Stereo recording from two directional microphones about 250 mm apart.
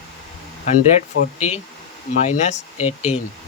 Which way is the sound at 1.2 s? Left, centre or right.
Left.